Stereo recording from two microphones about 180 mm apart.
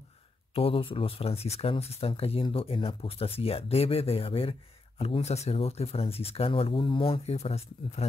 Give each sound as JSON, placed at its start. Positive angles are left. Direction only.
{"t": 0.6, "sound": "speech", "side_deg": 30}